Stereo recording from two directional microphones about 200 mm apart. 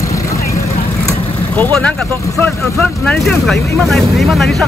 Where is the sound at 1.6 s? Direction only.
5° left (ahead or behind).